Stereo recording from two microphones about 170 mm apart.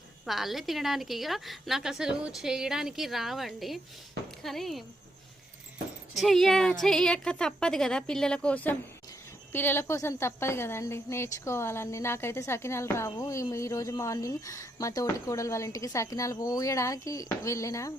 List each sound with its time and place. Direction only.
0.3 s a woman's voice: centre (ahead or behind)
6.1 s a woman's voice: centre (ahead or behind); by 17.9 s 20° left (ahead or behind)